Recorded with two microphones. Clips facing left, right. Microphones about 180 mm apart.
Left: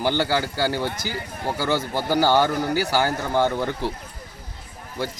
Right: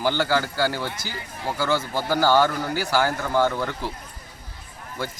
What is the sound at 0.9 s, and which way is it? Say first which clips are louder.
Speech: left 4 dB; 50° left (ahead or behind).